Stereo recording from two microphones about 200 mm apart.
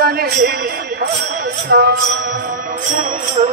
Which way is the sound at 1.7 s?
55° right (ahead or behind).